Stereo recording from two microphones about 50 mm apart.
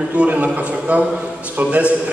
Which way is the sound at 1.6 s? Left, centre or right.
Right.